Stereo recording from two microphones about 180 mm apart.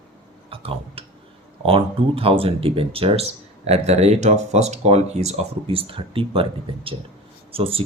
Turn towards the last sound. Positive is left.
turn(degrees=-30)  # may be behind; listen again after turning